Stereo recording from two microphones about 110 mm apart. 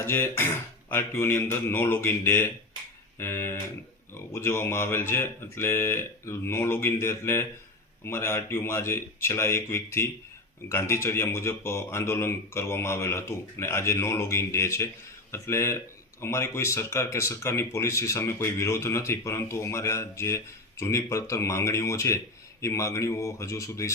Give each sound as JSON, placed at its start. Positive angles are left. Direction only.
{"t": 0.0, "sound": "speech", "side_deg": 20}